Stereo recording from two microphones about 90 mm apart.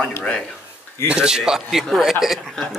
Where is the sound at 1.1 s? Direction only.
10° right (ahead or behind).